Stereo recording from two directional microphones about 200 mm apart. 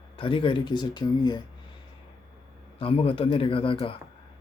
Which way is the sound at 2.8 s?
30° left (ahead or behind).